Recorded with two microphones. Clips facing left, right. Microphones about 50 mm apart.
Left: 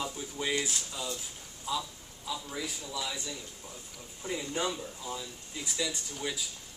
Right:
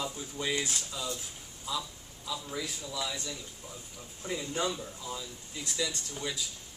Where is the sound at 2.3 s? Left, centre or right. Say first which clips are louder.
Even; centre.